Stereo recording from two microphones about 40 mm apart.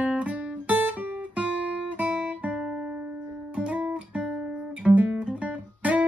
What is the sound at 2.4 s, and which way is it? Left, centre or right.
Guitar, right.